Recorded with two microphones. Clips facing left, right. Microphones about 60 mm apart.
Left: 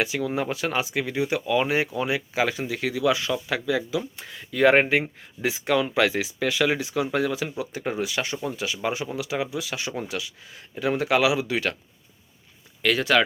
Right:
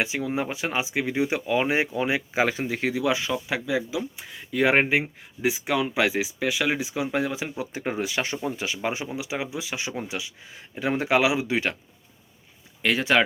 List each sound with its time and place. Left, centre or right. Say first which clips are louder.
0.0 s speech: left 1 dB; right
12.8 s speech: even; right